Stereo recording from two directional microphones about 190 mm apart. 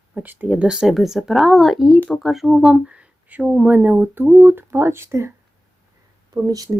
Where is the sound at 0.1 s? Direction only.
10° right (ahead or behind).